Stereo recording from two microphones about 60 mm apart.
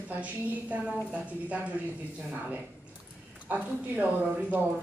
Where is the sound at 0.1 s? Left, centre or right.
Right.